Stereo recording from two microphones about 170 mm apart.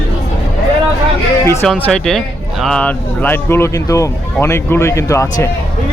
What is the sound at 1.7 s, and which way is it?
A man's voice, 5° left (ahead or behind).